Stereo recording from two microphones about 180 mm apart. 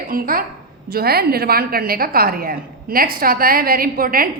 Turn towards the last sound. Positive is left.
turn(degrees=-50)  # may be behind; listen again after turning